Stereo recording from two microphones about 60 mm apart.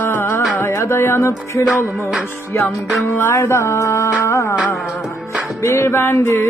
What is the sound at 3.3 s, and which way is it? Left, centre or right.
Music, left.